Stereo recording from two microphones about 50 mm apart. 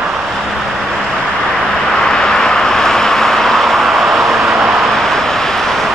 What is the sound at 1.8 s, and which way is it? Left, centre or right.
Vehicle, centre.